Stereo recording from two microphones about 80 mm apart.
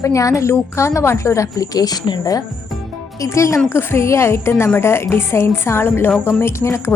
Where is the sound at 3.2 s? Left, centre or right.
Left.